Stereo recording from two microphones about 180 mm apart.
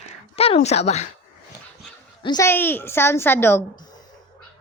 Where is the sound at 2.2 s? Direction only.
25° left (ahead or behind).